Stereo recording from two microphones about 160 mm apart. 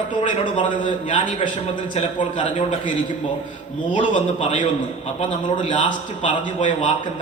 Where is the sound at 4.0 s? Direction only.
35° left (ahead or behind).